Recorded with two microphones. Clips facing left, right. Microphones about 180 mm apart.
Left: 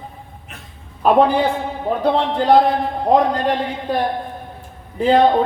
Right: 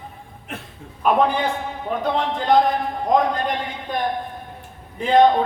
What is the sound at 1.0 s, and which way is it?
A man's voice, 35° left (ahead or behind).